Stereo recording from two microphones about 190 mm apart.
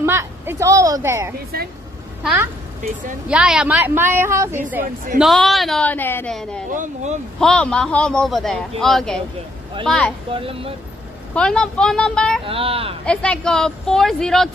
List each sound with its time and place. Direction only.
0.0 s a woman's voice: 10° right (ahead or behind)
5.2 s a man's voice: centre (ahead or behind)
6.7 s speech: 40° right (ahead or behind)
7.3 s a man's voice: 5° left (ahead or behind)
10.3 s speech: 30° right (ahead or behind)
11.3 s a man's voice: 5° left (ahead or behind)
12.4 s speech: 30° right (ahead or behind)
13.0 s a man's voice: 5° left (ahead or behind)